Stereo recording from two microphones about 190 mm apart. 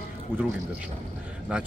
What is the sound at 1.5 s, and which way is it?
Speech, 5° right (ahead or behind).